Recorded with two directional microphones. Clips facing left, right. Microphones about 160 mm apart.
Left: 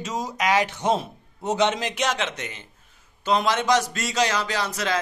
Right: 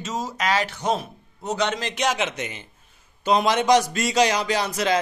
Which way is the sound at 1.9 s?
5° right (ahead or behind).